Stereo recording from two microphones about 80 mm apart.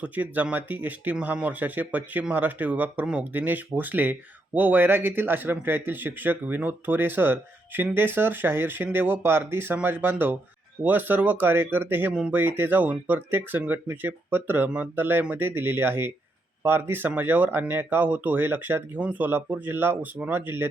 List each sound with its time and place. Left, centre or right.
0.0 s speech: centre